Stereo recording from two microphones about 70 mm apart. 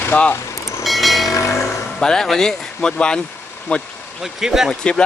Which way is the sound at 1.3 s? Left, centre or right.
Left.